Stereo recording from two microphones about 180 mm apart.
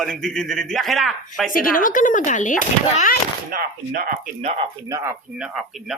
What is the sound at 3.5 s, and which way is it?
Speech, 55° right (ahead or behind).